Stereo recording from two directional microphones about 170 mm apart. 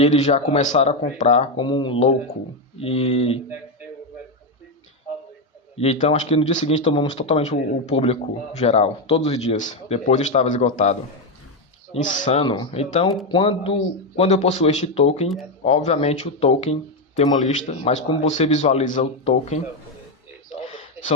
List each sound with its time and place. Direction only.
0.0 s speech: 40° left (ahead or behind)
1.5 s speech: 25° left (ahead or behind)
5.7 s speech: 40° left (ahead or behind)
11.9 s a man's voice: 45° left (ahead or behind)
12.4 s speech: 30° left (ahead or behind)
14.2 s a man's voice: 40° left (ahead or behind)